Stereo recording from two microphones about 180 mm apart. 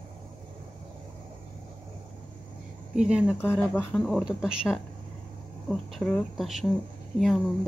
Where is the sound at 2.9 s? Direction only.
5° right (ahead or behind).